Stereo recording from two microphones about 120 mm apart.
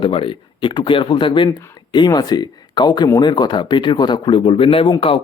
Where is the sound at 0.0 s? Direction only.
45° left (ahead or behind).